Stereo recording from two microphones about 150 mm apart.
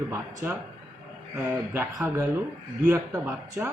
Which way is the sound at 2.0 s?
20° right (ahead or behind).